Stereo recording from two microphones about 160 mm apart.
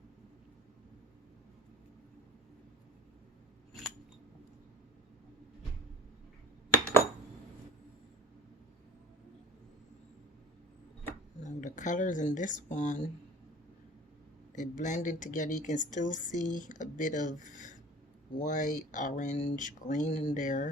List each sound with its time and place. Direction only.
11.4 s speech: 50° left (ahead or behind)
14.5 s speech: 50° left (ahead or behind)